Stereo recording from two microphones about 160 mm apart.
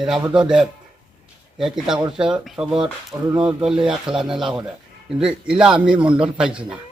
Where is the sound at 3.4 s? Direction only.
5° right (ahead or behind).